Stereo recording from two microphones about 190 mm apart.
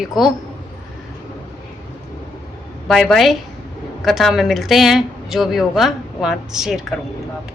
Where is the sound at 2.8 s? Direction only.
Centre (ahead or behind).